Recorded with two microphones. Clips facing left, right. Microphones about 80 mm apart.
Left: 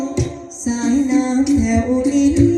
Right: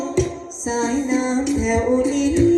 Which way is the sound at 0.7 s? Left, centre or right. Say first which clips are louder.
Left 3 dB; right.